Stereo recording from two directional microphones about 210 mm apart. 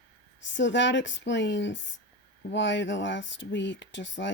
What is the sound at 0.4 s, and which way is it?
Speech, 60° left (ahead or behind).